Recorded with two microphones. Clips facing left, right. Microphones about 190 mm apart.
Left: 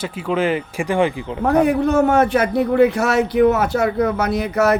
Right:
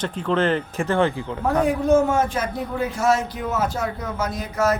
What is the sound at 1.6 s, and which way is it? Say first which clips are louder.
A man's voice: left 1 dB; 65° left (ahead or behind).